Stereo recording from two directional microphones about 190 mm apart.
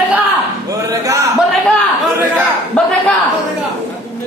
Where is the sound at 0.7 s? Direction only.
15° right (ahead or behind).